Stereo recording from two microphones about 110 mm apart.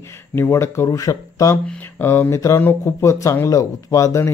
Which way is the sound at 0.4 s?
25° left (ahead or behind).